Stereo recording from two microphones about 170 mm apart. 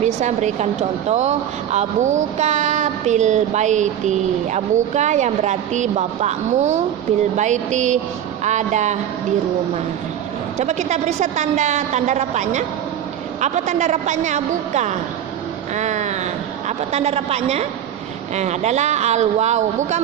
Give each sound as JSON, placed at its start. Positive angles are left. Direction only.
{"t": 0.0, "sound": "a woman's voice", "side_deg": -45}
{"t": 10.6, "sound": "a woman's voice", "side_deg": -40}